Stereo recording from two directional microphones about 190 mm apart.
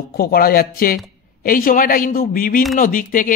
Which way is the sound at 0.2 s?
50° left (ahead or behind).